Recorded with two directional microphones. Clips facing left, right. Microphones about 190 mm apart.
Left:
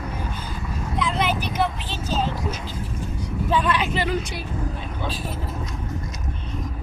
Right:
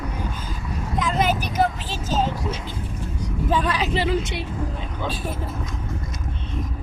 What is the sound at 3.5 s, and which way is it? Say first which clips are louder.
Speech: even; 35° right (ahead or behind).